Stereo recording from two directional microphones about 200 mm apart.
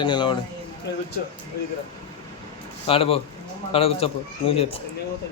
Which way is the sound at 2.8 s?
30° left (ahead or behind).